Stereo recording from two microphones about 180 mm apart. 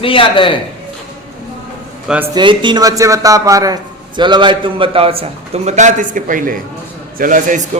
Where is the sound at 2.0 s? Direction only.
10° right (ahead or behind).